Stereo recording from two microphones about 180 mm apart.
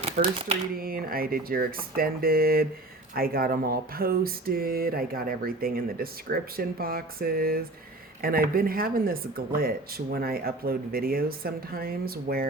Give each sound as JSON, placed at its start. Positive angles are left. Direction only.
{"t": 0.2, "sound": "speech", "side_deg": -40}
{"t": 0.8, "sound": "speech", "side_deg": -55}